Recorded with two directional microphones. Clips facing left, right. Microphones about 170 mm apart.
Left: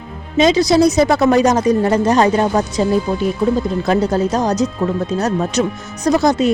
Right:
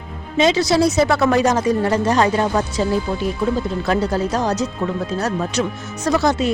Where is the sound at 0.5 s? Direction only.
15° left (ahead or behind).